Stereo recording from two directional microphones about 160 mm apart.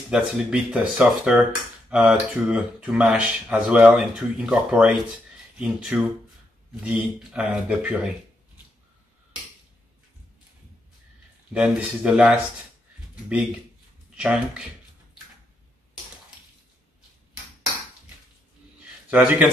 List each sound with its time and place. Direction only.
0.1 s speech: 5° right (ahead or behind)
11.5 s speech: 5° right (ahead or behind)
19.0 s a man's voice: 10° right (ahead or behind)